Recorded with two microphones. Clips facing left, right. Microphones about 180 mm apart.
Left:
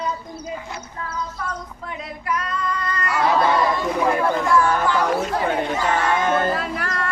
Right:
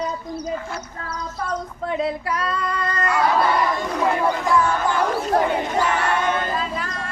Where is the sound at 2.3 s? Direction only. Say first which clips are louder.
Right 1 dB; 30° right (ahead or behind).